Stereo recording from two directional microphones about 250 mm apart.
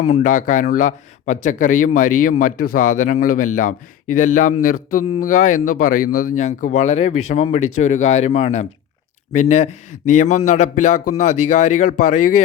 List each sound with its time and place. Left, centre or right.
0.0 s speech: left